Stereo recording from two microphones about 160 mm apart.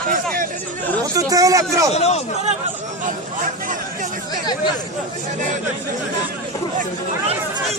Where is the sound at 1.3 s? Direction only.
20° right (ahead or behind).